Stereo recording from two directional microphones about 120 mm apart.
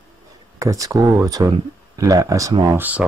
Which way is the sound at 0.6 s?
30° right (ahead or behind).